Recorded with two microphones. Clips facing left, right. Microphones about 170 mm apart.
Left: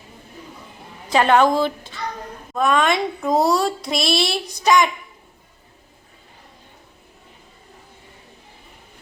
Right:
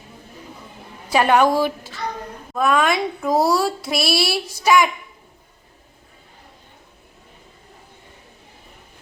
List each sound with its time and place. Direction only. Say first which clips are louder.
1.1 s a child's voice: even; 10° right (ahead or behind)